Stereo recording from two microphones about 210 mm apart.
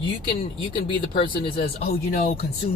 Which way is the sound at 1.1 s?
25° left (ahead or behind).